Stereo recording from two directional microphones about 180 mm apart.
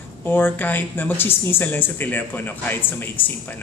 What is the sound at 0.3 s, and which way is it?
A man's voice, 10° left (ahead or behind).